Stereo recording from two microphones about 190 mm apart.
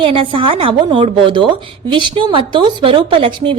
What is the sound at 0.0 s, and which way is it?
Speech, 25° right (ahead or behind).